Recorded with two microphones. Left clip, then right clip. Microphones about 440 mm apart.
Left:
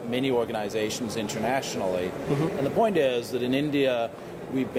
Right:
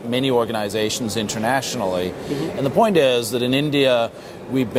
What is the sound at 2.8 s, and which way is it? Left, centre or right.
Speech, right.